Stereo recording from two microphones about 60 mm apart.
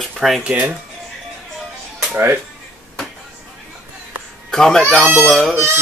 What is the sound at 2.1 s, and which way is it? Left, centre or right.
Speech, right.